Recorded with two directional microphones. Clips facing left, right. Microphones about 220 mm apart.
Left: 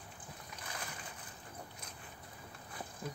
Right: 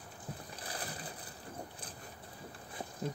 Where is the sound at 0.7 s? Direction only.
35° right (ahead or behind).